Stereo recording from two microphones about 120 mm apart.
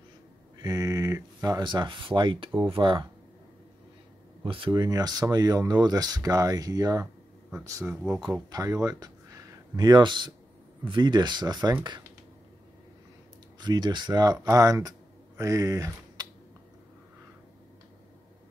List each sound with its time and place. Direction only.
0.6 s speech: 30° right (ahead or behind)
4.5 s speech: 45° right (ahead or behind)
4.7 s speech: 35° right (ahead or behind)
7.8 s speech: 5° right (ahead or behind)
8.5 s speech: 30° right (ahead or behind)
13.6 s speech: 35° right (ahead or behind)